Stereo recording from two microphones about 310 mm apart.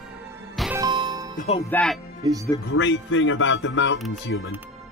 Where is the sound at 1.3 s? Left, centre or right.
Left.